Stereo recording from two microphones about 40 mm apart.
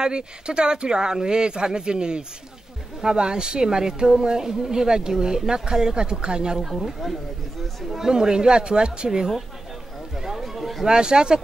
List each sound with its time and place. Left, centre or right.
0.0 s speech: right
6.6 s speech: centre
8.1 s speech: centre
10.1 s a sound: centre
10.9 s speech: right